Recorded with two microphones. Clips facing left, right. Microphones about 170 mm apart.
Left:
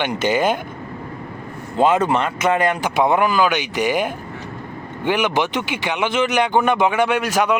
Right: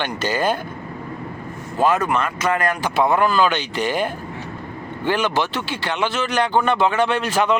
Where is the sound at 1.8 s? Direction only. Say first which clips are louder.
Left 2 dB; 20° left (ahead or behind).